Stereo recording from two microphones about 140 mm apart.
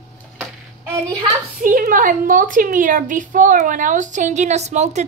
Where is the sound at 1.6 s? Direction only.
75° right (ahead or behind).